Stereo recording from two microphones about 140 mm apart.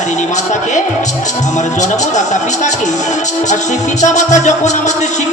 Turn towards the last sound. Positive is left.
turn(degrees=55)  # may be behind; listen again after turning